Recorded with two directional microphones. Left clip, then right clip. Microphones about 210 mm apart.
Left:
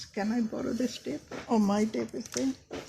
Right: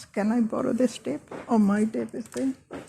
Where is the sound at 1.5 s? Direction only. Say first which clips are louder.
Right 3 dB; 15° right (ahead or behind).